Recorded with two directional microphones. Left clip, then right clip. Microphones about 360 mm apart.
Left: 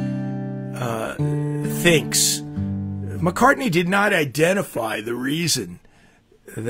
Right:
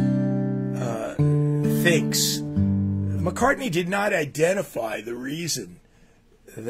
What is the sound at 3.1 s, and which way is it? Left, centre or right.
Speech, left.